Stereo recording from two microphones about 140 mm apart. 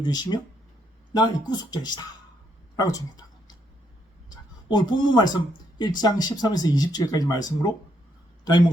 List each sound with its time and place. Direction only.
0.0 s a woman's voice: 30° left (ahead or behind)
4.7 s speech: 30° left (ahead or behind)